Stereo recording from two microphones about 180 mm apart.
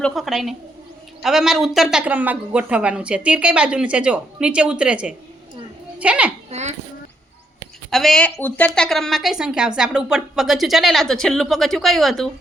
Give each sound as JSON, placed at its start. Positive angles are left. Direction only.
{"t": 0.0, "sound": "speech", "side_deg": 0}
{"t": 6.5, "sound": "a sound", "side_deg": -40}
{"t": 7.9, "sound": "speech", "side_deg": 0}